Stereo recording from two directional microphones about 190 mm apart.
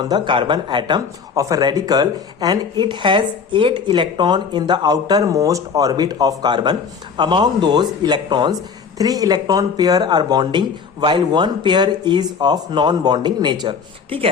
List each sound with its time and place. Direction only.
0.0 s a man's voice: 25° right (ahead or behind)